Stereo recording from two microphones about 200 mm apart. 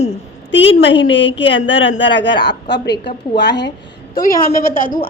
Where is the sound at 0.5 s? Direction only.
65° left (ahead or behind).